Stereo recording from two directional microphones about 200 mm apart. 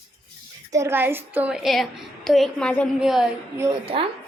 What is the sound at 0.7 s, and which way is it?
A woman's voice, 15° right (ahead or behind).